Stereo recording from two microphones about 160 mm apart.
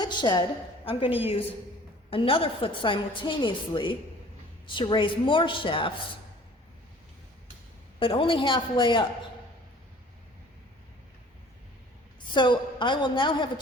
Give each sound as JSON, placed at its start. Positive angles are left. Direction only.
{"t": 0.0, "sound": "a woman's voice", "side_deg": 25}
{"t": 7.9, "sound": "a woman's voice", "side_deg": 35}
{"t": 12.3, "sound": "a woman's voice", "side_deg": 30}